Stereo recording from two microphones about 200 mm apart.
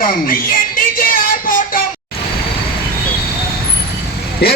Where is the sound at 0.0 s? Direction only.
45° left (ahead or behind).